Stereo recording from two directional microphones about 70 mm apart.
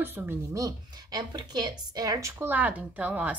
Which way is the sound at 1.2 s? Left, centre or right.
Right.